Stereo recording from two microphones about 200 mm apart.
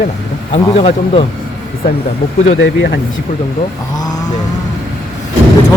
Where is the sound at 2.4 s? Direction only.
75° left (ahead or behind).